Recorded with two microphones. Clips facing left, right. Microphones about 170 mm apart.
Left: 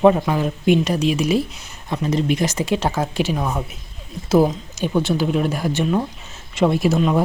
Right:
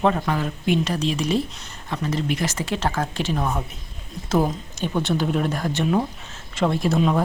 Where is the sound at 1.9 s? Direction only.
15° left (ahead or behind).